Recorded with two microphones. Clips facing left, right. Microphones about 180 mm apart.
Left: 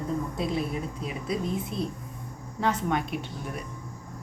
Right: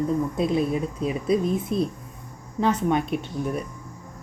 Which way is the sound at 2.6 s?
20° right (ahead or behind).